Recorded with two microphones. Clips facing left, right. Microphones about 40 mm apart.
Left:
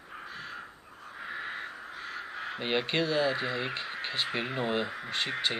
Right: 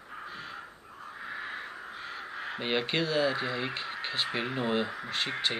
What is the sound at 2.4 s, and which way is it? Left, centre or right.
Speech, centre.